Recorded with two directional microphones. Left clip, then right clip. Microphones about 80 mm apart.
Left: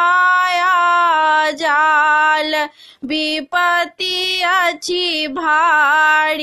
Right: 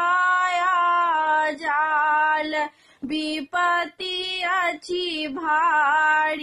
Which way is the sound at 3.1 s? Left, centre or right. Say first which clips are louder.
Left 8 dB; left.